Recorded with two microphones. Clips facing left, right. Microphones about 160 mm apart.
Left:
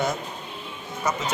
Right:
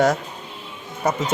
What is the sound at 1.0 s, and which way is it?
Speech, 55° right (ahead or behind).